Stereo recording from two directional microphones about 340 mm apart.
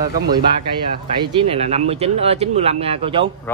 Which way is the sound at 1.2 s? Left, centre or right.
Centre.